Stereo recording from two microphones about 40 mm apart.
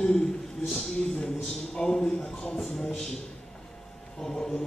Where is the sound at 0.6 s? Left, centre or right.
Centre.